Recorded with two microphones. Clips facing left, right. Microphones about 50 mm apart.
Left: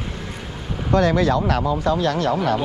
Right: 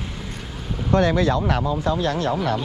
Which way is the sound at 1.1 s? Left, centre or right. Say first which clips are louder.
Left 2 dB; left.